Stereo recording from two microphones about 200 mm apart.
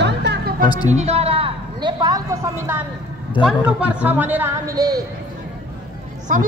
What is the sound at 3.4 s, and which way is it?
Speech, 25° left (ahead or behind).